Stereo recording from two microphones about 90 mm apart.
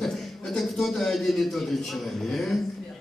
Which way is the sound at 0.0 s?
Centre (ahead or behind).